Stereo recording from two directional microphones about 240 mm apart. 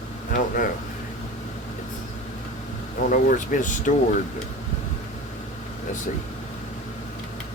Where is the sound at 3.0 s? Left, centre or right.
Left.